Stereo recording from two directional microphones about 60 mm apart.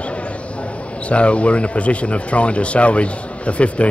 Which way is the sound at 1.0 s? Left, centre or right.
Left.